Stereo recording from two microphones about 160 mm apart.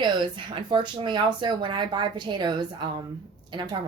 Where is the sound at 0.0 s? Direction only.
30° right (ahead or behind).